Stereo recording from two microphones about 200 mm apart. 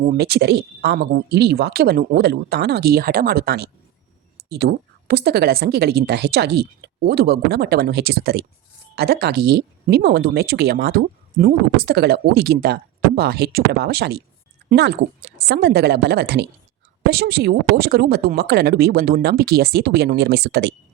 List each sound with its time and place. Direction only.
0.0 s speech: 50° right (ahead or behind)